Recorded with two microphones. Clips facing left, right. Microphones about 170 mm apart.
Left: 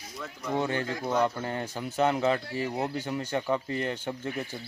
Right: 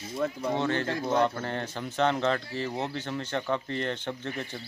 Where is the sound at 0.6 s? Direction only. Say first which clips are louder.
Left 1 dB; 10° left (ahead or behind).